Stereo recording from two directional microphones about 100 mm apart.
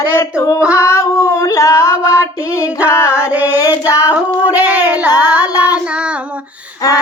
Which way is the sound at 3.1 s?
15° right (ahead or behind).